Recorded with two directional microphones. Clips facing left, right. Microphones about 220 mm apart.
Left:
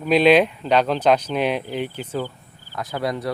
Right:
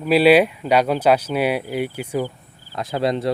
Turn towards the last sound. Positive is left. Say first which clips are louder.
# right 4 dB
turn(degrees=-25)  # may be behind; listen again after turning